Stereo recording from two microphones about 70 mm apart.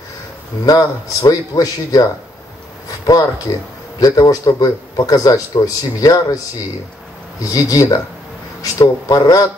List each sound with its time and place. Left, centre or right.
0.7 s a man's voice: left
4.0 s a man's voice: left
7.5 s a man's voice: left